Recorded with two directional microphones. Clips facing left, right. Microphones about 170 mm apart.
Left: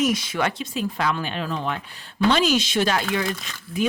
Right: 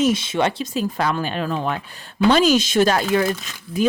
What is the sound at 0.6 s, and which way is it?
Speech, 40° right (ahead or behind).